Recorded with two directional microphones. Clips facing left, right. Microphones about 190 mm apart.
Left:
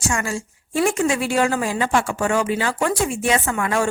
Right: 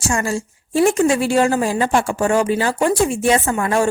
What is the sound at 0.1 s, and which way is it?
A woman's voice, 35° right (ahead or behind).